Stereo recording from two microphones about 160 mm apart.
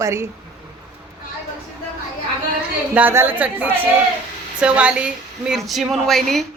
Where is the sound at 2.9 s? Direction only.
15° right (ahead or behind).